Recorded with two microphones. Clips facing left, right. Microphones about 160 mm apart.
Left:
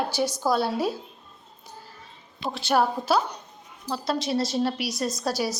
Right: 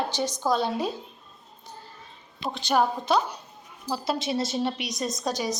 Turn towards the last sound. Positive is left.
turn(degrees=5)  # may be behind; listen again after turning